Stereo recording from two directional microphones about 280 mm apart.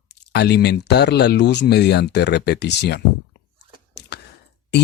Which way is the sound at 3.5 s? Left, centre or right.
Left.